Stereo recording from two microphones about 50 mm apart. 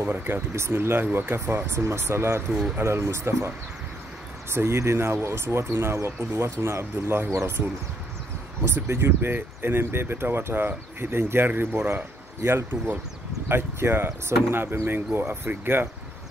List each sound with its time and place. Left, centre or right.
0.1 s speech: right
1.7 s speech: right
8.6 s speech: right